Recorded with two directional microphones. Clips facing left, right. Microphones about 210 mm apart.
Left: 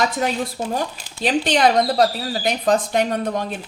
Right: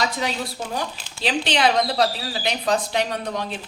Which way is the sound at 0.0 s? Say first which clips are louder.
Left 4 dB; 50° left (ahead or behind).